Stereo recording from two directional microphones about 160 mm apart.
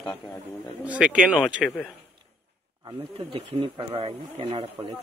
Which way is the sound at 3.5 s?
35° right (ahead or behind).